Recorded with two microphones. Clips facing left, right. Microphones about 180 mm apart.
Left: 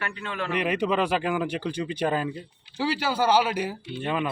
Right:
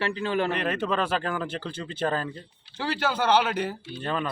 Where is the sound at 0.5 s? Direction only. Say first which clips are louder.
Left 2 dB; 15° left (ahead or behind).